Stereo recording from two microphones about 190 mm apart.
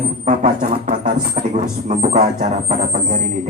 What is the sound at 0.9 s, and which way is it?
Speech, 45° right (ahead or behind).